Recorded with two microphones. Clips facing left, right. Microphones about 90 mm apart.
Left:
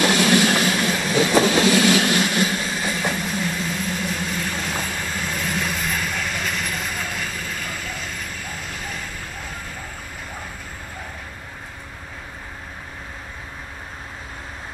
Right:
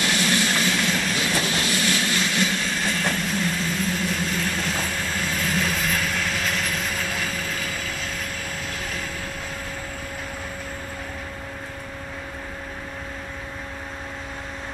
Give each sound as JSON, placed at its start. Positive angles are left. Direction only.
{"t": 0.2, "sound": "music", "side_deg": 70}
{"t": 0.6, "sound": "a sound", "side_deg": 10}
{"t": 1.1, "sound": "train", "side_deg": 25}
{"t": 1.7, "sound": "vehicle", "side_deg": 80}
{"t": 2.1, "sound": "train", "side_deg": 10}